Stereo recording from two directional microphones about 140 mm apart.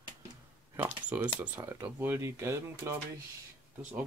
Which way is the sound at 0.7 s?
10° right (ahead or behind).